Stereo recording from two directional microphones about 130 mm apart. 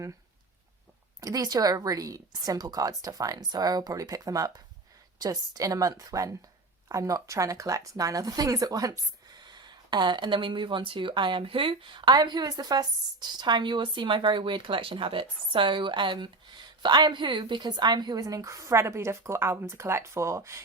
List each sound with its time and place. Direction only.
1.2 s a woman's voice: 30° right (ahead or behind)